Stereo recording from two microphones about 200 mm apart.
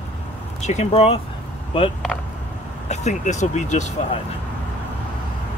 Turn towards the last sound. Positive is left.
turn(degrees=35)  # may be behind; listen again after turning